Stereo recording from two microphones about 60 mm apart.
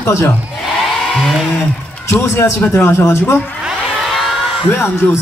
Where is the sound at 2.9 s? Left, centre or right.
Left.